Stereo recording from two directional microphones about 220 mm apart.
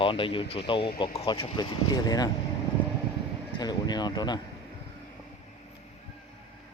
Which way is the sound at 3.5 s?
20° left (ahead or behind).